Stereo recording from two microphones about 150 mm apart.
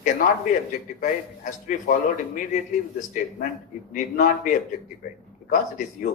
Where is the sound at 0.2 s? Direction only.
65° left (ahead or behind).